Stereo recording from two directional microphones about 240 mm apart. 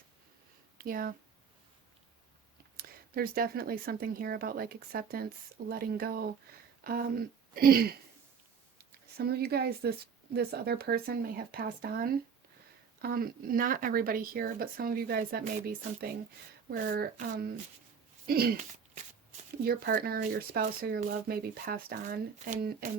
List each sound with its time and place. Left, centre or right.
0.8 s speech: right
2.7 s speech: right
9.1 s speech: right
18.5 s a sound: right
19.6 s speech: right